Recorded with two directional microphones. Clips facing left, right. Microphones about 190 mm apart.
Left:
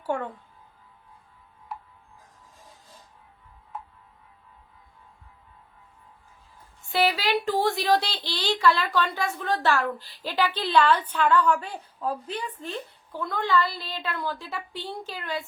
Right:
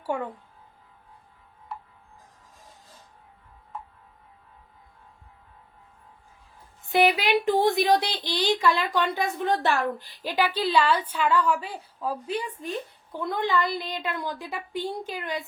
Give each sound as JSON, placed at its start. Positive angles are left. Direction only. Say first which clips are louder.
{"t": 0.0, "sound": "speech", "louder": "even", "side_deg": -10}
{"t": 6.8, "sound": "a woman's voice", "louder": "right 3 dB", "side_deg": -20}